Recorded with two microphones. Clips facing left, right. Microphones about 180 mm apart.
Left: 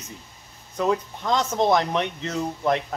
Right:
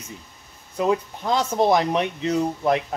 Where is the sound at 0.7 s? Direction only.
10° right (ahead or behind).